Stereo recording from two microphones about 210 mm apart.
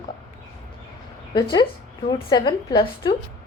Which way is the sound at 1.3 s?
20° left (ahead or behind).